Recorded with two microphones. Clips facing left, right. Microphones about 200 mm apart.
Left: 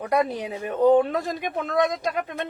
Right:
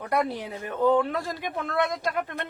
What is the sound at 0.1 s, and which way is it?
A woman's voice, 20° left (ahead or behind).